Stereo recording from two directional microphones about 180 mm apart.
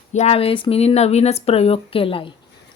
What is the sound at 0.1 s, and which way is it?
Speech, 35° left (ahead or behind).